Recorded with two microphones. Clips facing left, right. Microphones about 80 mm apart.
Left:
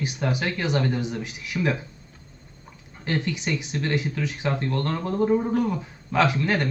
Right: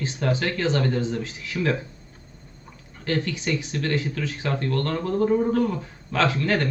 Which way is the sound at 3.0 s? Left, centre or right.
Left.